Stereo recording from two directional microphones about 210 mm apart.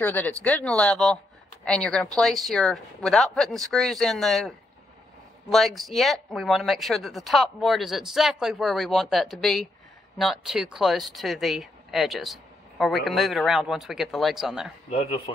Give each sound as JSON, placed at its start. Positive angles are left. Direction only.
{"t": 0.0, "sound": "speech", "side_deg": 10}
{"t": 15.3, "sound": "speech", "side_deg": 25}